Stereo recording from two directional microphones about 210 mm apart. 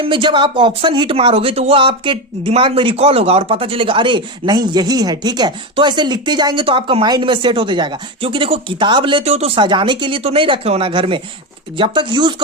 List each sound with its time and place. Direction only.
0.0 s speech: 25° right (ahead or behind)